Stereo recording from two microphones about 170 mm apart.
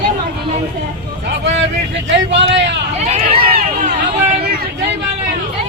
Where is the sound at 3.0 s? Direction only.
40° right (ahead or behind).